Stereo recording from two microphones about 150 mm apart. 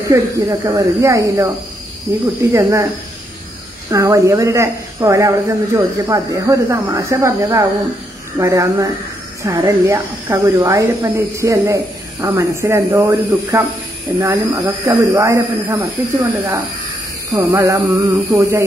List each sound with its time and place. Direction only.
0.0 s speech: 20° right (ahead or behind)
2.5 s speech: 20° right (ahead or behind)
3.9 s speech: 20° right (ahead or behind)